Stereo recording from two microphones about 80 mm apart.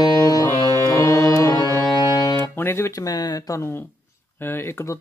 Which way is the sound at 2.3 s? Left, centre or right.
Left.